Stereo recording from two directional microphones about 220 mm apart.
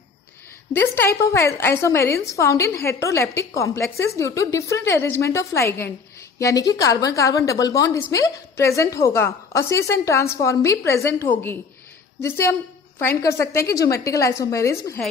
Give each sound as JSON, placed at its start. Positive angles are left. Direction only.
{"t": 0.7, "sound": "a woman's voice", "side_deg": 10}
{"t": 12.2, "sound": "a woman's voice", "side_deg": 10}